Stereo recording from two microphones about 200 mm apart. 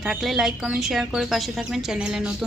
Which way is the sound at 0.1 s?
Centre (ahead or behind).